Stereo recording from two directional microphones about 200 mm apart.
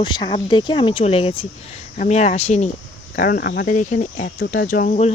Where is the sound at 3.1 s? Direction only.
45° left (ahead or behind).